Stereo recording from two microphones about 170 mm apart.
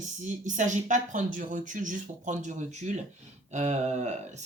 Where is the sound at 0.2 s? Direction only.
45° right (ahead or behind).